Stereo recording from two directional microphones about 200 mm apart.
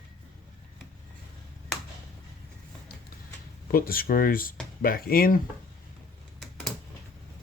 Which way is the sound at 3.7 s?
45° left (ahead or behind).